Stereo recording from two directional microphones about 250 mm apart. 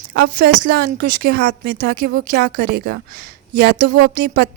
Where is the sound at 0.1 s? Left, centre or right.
Right.